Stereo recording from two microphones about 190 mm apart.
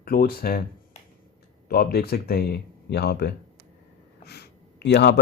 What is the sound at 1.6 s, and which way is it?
Speech, 55° left (ahead or behind).